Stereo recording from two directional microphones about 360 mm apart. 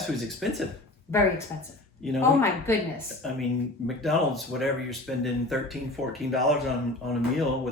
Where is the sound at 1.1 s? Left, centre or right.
Centre.